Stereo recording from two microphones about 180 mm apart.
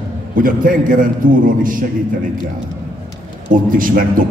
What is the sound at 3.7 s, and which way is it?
Speech, 50° right (ahead or behind).